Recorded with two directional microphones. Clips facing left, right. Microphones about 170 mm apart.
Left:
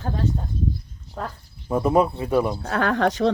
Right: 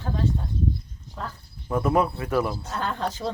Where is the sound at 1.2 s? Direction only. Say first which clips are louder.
Left 4 dB; 55° left (ahead or behind).